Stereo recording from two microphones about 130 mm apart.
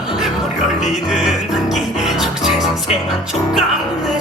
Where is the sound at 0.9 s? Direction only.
5° right (ahead or behind).